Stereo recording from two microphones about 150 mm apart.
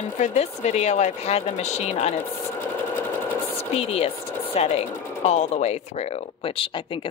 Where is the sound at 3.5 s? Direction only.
40° left (ahead or behind).